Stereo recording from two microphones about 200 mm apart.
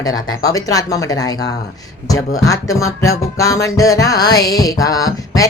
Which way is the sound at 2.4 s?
15° left (ahead or behind).